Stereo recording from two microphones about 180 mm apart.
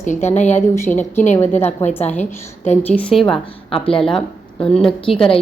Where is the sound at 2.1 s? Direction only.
10° left (ahead or behind).